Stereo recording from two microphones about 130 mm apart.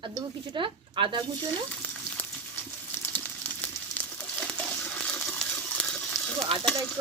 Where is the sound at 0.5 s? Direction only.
40° right (ahead or behind).